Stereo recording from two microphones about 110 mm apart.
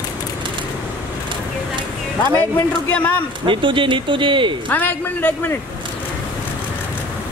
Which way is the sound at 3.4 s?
50° right (ahead or behind).